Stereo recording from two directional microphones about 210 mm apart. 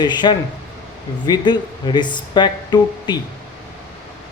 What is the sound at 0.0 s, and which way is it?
Speech, 20° left (ahead or behind).